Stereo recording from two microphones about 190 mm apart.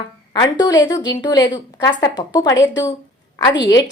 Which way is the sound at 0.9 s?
20° left (ahead or behind).